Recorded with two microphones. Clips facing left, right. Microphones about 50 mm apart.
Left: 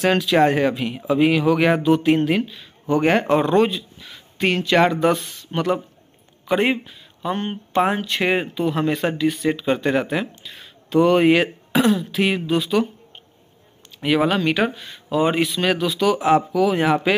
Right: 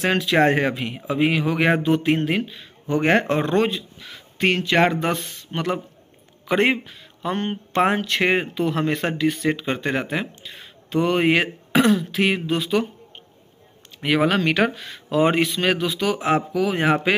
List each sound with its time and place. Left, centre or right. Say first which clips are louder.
0.0 s speech: left 2 dB; right
6.4 s speech: even; right
8.5 s speech: left 1 dB; right
11.7 s speech: right 1 dB; right
12.2 s speech: left 1 dB; right
13.9 s speech: left 1 dB; right
14.7 s speech: left 1 dB; right